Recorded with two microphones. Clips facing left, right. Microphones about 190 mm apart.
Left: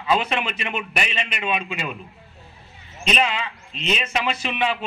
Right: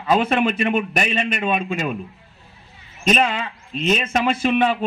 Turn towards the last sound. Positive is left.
turn(degrees=-50)  # may be behind; listen again after turning